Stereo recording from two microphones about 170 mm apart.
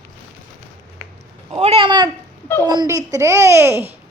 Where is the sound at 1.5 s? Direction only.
35° right (ahead or behind).